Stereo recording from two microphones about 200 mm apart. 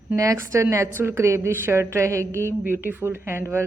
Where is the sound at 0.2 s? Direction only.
15° right (ahead or behind).